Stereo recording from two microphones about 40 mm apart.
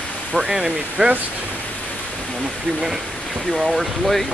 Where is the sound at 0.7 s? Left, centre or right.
Right.